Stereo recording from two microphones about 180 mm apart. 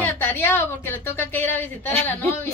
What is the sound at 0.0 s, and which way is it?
A woman's voice, 10° left (ahead or behind).